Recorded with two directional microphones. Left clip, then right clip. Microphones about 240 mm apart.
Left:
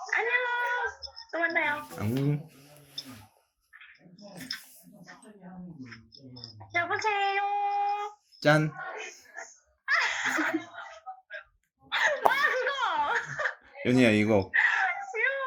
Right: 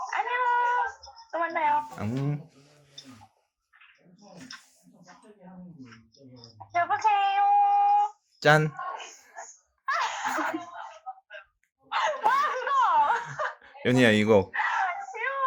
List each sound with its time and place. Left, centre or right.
0.0 s child singing: centre
0.6 s music: centre
2.0 s speech: right
4.4 s a sound: centre
5.8 s a sound: centre
8.4 s speech: right
8.7 s a sound: centre
9.8 s laughter: centre
11.9 s laughter: centre
13.8 s speech: right
15.1 s hands: centre